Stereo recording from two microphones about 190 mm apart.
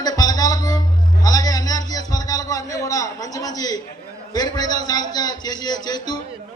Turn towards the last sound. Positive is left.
turn(degrees=20)  # may be behind; listen again after turning